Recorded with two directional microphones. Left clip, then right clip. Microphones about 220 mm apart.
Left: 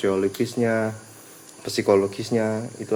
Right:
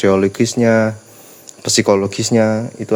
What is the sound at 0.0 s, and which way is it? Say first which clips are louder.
Speech: right 9 dB; 45° right (ahead or behind).